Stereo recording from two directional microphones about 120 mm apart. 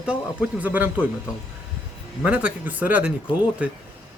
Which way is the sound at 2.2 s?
10° right (ahead or behind).